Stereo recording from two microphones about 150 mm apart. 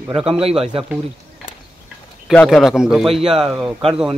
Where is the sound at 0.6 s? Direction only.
40° right (ahead or behind).